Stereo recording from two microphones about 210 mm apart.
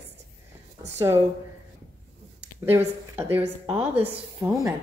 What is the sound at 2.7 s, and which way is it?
A woman's voice, 10° right (ahead or behind).